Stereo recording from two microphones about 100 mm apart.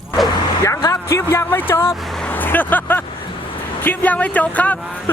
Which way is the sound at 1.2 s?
25° left (ahead or behind).